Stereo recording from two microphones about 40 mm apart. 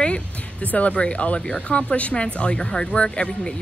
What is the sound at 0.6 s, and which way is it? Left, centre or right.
Speech, left.